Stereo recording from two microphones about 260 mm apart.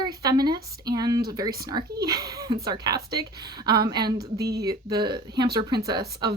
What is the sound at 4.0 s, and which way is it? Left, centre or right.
Speech, right.